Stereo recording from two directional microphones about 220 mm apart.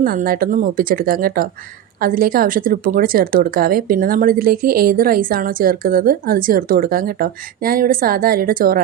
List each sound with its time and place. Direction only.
0.0 s speech: 40° right (ahead or behind)